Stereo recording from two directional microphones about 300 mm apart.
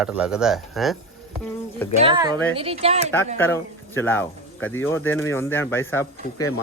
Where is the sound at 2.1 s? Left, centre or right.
Centre.